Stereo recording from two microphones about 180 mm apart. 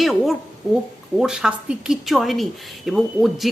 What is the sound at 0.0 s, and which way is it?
A woman's voice, centre (ahead or behind).